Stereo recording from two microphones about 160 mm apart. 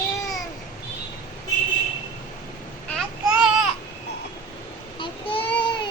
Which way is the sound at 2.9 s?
Centre (ahead or behind).